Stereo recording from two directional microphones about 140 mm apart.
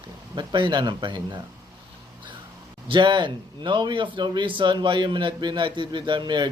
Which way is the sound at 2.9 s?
35° right (ahead or behind).